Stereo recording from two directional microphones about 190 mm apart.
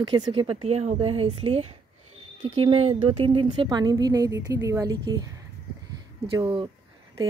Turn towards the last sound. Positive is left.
turn(degrees=-25)  # may be behind; listen again after turning